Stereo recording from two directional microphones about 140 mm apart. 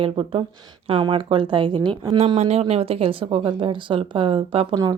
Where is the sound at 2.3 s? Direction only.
50° right (ahead or behind); by 5.0 s 30° right (ahead or behind).